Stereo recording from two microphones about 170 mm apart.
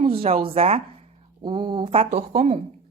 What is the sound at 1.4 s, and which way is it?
Speech, 25° right (ahead or behind).